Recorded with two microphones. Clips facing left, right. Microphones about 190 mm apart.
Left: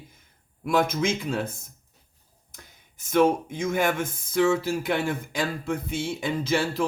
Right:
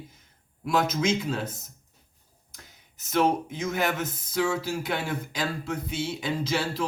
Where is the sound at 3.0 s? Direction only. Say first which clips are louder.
Left 3 dB; 50° left (ahead or behind).